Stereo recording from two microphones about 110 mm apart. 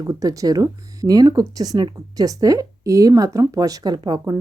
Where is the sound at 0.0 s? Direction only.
30° right (ahead or behind).